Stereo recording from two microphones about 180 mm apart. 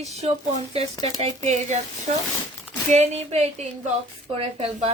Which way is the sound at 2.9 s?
40° right (ahead or behind).